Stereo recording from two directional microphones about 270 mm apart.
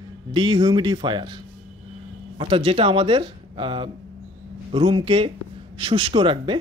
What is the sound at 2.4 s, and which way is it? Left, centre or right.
A man's voice, centre.